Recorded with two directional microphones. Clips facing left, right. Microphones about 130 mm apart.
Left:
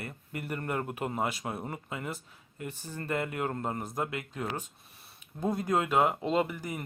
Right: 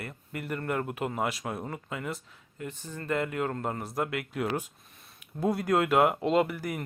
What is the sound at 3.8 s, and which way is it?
Speech, centre (ahead or behind).